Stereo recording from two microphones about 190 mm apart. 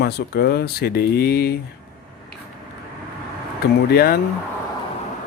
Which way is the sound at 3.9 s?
55° left (ahead or behind).